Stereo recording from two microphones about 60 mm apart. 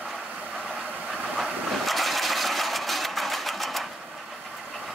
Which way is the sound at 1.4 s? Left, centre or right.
Centre.